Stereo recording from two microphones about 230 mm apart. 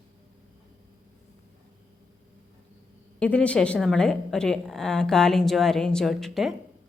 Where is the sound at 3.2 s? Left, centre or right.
Centre.